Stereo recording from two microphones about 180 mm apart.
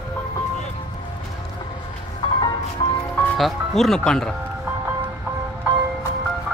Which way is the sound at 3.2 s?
Centre (ahead or behind).